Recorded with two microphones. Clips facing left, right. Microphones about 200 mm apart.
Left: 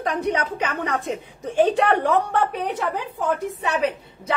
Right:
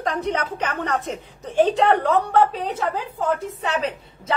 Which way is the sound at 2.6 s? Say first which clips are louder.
Even; 15° left (ahead or behind).